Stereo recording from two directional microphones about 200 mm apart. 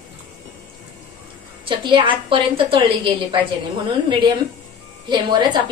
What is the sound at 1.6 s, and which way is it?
A woman's voice, 25° right (ahead or behind).